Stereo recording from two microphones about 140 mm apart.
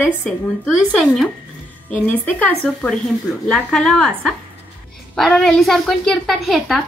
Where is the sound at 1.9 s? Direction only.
10° left (ahead or behind).